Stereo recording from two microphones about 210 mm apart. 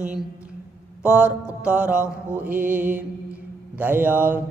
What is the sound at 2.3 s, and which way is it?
Mantra, 10° right (ahead or behind).